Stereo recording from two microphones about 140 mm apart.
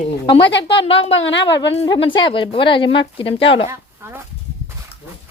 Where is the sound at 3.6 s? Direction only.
20° right (ahead or behind).